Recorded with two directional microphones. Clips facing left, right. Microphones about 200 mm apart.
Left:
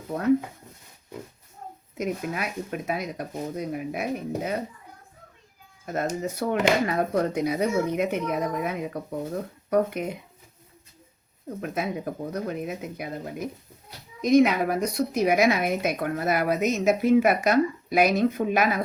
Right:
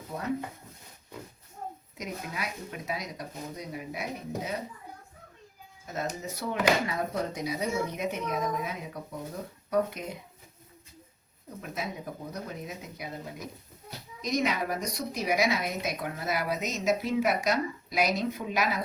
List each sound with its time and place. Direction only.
2.0 s a woman's voice: 55° left (ahead or behind)
5.8 s a woman's voice: 55° left (ahead or behind)
11.6 s a woman's voice: 55° left (ahead or behind)